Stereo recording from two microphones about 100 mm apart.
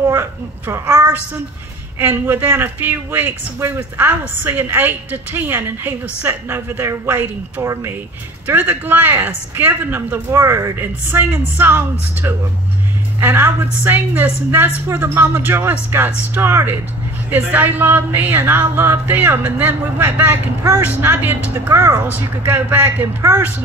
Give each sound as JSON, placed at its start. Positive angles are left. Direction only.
{"t": 0.1, "sound": "a woman's voice", "side_deg": -25}